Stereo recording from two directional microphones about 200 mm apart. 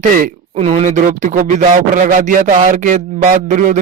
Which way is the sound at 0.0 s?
40° right (ahead or behind).